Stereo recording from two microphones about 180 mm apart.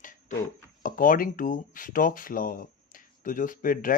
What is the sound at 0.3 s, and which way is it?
Speech, 45° left (ahead or behind).